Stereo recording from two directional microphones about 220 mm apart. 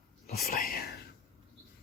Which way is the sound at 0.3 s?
45° left (ahead or behind).